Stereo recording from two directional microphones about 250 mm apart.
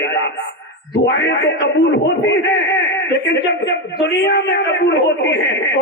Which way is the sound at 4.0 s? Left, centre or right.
Left.